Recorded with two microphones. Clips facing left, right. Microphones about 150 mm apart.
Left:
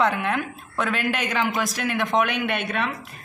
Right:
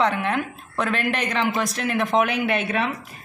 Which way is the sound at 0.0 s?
Centre (ahead or behind).